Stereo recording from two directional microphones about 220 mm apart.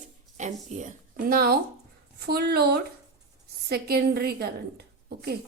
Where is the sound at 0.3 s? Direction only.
35° right (ahead or behind).